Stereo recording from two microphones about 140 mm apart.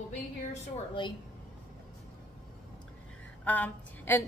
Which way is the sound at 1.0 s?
35° left (ahead or behind).